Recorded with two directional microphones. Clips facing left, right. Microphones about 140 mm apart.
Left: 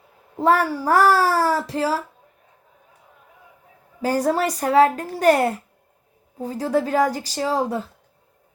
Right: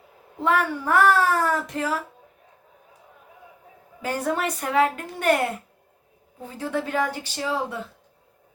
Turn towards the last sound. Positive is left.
turn(degrees=40)  # may be behind; listen again after turning